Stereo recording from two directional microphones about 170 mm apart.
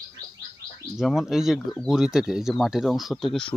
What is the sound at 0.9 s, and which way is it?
Speech, centre (ahead or behind).